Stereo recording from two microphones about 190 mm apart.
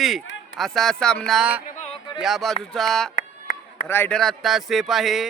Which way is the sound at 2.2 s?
Centre (ahead or behind).